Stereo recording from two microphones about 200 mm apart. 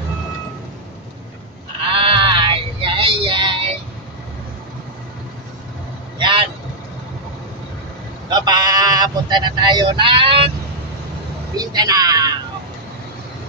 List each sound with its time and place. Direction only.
2.0 s a sound: 25° right (ahead or behind)
3.3 s vehicle: 25° right (ahead or behind)
6.1 s vehicle: 25° right (ahead or behind)
8.3 s sheep: 20° right (ahead or behind)
11.5 s speech: 20° right (ahead or behind)